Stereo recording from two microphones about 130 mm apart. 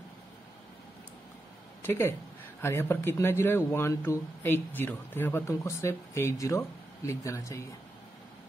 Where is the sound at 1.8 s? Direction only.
15° left (ahead or behind).